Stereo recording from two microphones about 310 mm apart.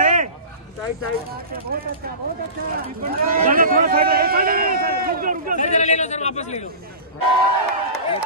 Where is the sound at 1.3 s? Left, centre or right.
Right.